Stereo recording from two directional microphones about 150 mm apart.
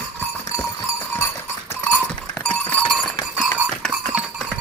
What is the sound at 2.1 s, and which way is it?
Goat, 10° left (ahead or behind).